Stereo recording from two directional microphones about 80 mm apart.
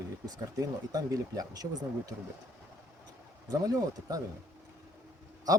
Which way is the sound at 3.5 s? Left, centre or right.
Right.